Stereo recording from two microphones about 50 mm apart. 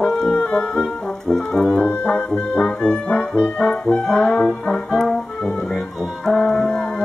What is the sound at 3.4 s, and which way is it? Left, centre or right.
Brass instrument, left.